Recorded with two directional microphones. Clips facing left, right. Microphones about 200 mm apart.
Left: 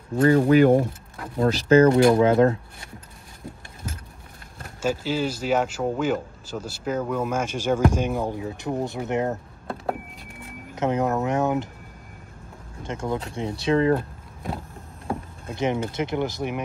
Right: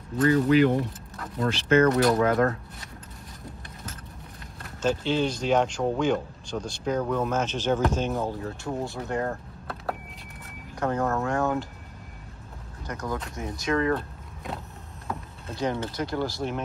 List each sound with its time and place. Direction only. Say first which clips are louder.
0.3 s speech: left 4 dB; 45° left (ahead or behind); by 2.5 s 25° left (ahead or behind)
4.8 s speech: even; 5° left (ahead or behind)
12.8 s speech: left 4 dB; 25° left (ahead or behind)
15.5 s speech: left 4 dB; 20° left (ahead or behind)